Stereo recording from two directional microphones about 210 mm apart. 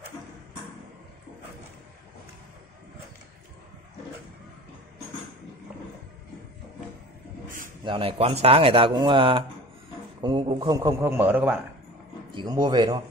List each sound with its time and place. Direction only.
7.8 s a man's voice: 25° right (ahead or behind); by 11.6 s 10° right (ahead or behind)
12.4 s speech: 20° right (ahead or behind)